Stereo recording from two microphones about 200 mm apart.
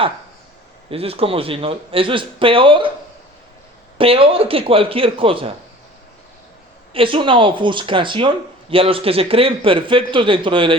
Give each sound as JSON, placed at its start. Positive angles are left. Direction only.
{"t": 0.9, "sound": "a man's voice", "side_deg": -30}
{"t": 3.9, "sound": "a man's voice", "side_deg": -25}
{"t": 6.9, "sound": "a man's voice", "side_deg": -25}